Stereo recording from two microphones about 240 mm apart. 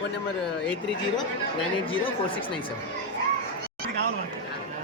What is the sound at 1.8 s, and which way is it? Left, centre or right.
Speech, left.